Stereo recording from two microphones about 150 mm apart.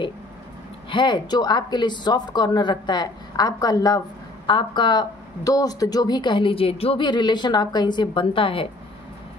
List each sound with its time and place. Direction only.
0.8 s speech: 30° left (ahead or behind)